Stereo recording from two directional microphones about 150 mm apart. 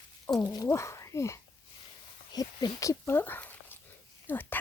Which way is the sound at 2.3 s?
25° left (ahead or behind).